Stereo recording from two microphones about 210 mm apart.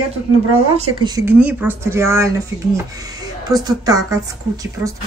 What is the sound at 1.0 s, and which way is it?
A woman's voice, 15° right (ahead or behind).